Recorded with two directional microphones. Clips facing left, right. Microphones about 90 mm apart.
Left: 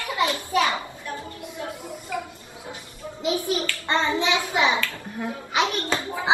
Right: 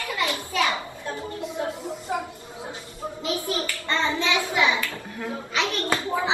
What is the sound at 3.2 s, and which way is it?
Clapping, 20° left (ahead or behind).